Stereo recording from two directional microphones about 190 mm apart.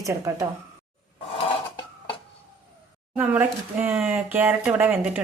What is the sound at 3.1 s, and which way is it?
Speech, 10° right (ahead or behind).